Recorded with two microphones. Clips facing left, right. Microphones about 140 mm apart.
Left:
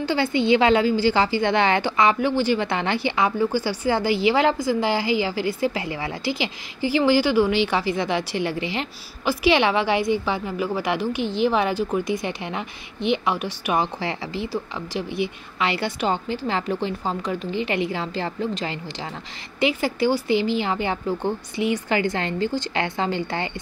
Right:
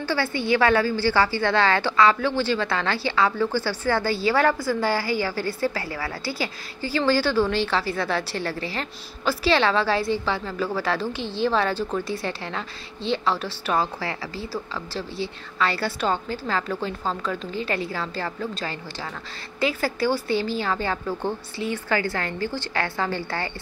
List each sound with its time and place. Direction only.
0.0 s a woman's voice: 20° left (ahead or behind)